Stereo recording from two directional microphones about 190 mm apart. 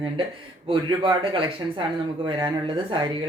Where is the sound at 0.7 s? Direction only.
25° right (ahead or behind).